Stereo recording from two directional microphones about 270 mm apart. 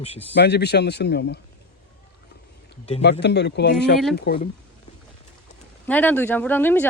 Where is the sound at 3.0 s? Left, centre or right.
Left.